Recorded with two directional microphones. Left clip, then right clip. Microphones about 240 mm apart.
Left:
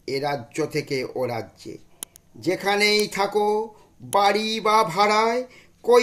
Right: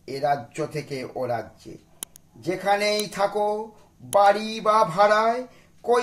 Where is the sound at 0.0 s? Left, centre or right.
Left.